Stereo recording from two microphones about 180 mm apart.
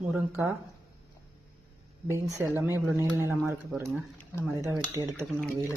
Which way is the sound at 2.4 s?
15° right (ahead or behind).